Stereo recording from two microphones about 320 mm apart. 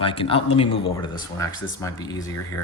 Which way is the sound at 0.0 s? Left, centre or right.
Centre.